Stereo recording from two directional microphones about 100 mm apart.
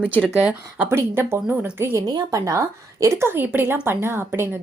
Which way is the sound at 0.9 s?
25° right (ahead or behind).